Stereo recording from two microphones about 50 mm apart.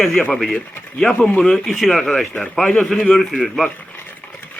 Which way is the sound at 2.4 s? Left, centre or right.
Centre.